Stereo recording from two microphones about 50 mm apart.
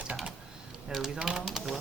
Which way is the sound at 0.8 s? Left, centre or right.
Centre.